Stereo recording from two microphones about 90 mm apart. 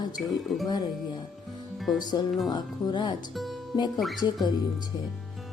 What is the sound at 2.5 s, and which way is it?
Music, 50° left (ahead or behind).